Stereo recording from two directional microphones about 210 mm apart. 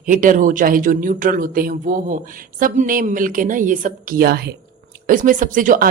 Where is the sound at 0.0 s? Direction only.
40° right (ahead or behind).